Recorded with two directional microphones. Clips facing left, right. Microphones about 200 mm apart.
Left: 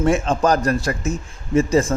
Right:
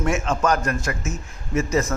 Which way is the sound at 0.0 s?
35° left (ahead or behind).